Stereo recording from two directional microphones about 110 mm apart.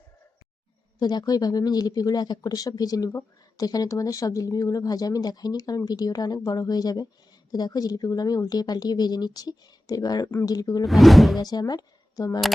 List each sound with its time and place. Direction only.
0.9 s speech: 40° left (ahead or behind)
10.8 s speech: centre (ahead or behind)
11.3 s speech: 35° left (ahead or behind)